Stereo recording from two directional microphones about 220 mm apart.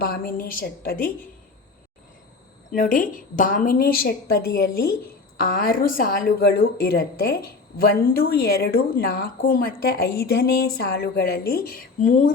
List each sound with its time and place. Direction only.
0.0 s a woman's voice: 40° left (ahead or behind)
2.7 s a woman's voice: 40° left (ahead or behind)